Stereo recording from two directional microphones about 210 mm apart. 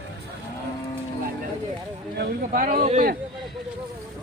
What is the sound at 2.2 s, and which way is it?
Speech, 40° right (ahead or behind).